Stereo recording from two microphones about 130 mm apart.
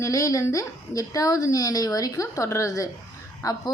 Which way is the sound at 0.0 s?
25° left (ahead or behind).